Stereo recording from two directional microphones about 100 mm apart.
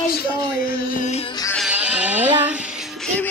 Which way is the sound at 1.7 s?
10° right (ahead or behind).